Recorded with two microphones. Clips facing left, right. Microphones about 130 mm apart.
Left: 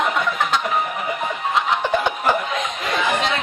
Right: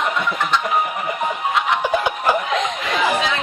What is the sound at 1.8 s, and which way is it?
Snicker, 10° right (ahead or behind).